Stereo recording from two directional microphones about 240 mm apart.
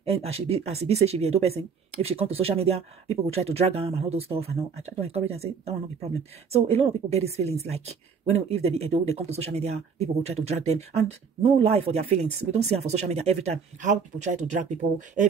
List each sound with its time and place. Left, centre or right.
0.0 s speech: right